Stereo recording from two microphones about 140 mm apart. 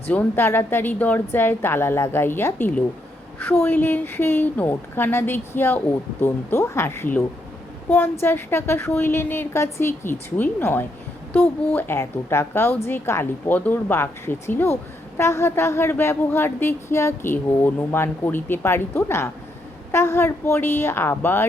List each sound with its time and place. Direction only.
0.1 s speech: 15° left (ahead or behind)